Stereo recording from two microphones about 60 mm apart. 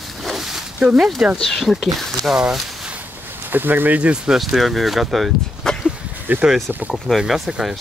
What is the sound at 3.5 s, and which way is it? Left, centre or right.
Speech, right.